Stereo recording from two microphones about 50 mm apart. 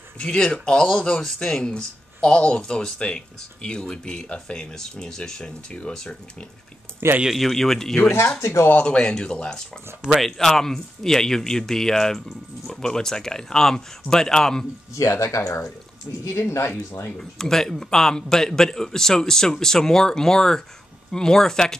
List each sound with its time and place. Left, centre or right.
0.2 s a man's voice: centre
7.2 s a man's voice: centre
8.7 s speech: centre
10.2 s a man's voice: centre
15.0 s speech: left
17.2 s a man's voice: centre